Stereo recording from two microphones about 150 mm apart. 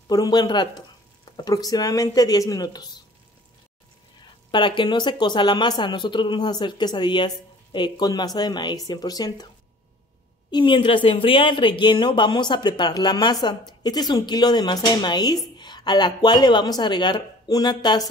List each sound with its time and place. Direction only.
0.1 s speech: 25° left (ahead or behind)
4.5 s speech: 30° left (ahead or behind)
10.5 s speech: 35° left (ahead or behind)